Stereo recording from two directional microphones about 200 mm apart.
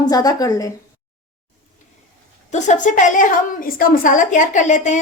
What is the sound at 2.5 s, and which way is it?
A woman's voice, 40° left (ahead or behind).